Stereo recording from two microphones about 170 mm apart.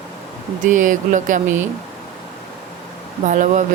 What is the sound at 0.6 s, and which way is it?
Speech, 50° right (ahead or behind).